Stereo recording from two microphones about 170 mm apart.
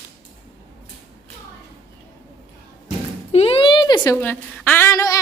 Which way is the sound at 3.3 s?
35° left (ahead or behind).